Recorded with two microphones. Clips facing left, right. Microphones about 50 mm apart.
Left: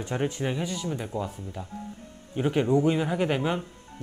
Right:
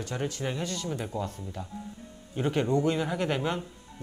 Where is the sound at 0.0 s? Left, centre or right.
Left.